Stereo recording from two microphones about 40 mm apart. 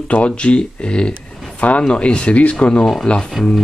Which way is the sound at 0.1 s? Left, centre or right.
Left.